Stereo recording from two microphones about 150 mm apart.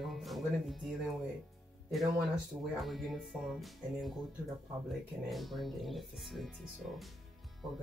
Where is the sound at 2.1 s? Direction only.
Centre (ahead or behind).